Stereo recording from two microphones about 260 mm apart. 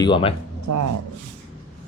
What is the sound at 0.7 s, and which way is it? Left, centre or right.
Speech, right.